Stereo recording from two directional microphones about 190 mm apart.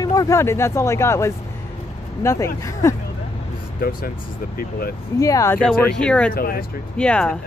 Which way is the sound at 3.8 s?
50° left (ahead or behind).